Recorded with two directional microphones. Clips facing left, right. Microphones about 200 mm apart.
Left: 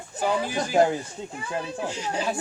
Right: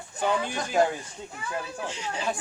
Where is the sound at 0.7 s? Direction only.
25° left (ahead or behind).